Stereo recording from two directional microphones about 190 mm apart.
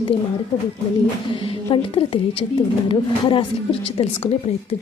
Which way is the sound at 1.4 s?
30° left (ahead or behind).